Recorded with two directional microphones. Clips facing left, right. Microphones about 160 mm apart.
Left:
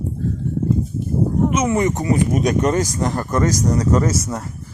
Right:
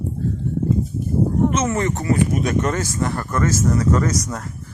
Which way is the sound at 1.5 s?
15° left (ahead or behind).